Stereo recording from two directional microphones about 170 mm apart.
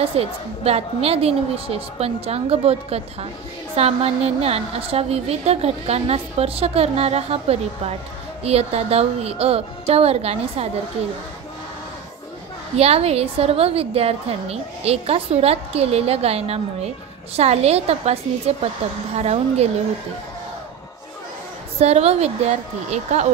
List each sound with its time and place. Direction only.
0.0 s a woman's voice: 35° right (ahead or behind)
12.7 s a woman's voice: 35° right (ahead or behind)
21.7 s a woman's voice: 40° right (ahead or behind)